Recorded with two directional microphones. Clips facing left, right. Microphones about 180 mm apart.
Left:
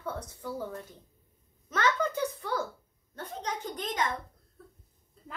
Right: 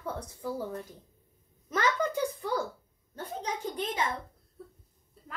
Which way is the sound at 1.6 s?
10° right (ahead or behind).